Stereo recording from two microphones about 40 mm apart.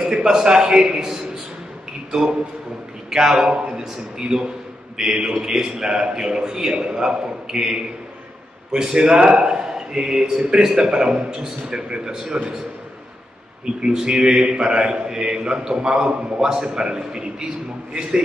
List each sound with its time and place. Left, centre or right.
0.0 s a man's voice: centre
3.1 s a man's voice: centre
3.4 s a man's voice: right
8.7 s a man's voice: centre
13.8 s a man's voice: right